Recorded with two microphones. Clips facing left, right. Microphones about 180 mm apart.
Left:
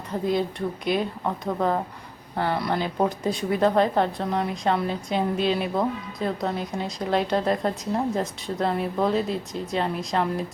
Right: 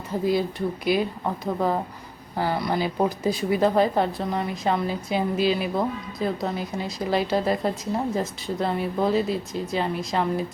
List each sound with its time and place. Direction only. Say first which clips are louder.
0.1 s a woman's voice: right 1 dB; 5° right (ahead or behind)